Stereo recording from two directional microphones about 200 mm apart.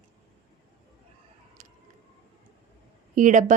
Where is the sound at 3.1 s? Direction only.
40° right (ahead or behind).